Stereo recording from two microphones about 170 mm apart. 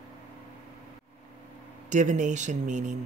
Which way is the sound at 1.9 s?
45° right (ahead or behind).